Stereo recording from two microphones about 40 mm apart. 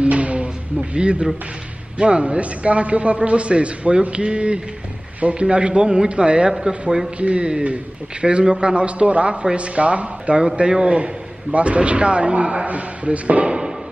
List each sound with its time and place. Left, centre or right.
0.0 s music: right
2.0 s a man's voice: right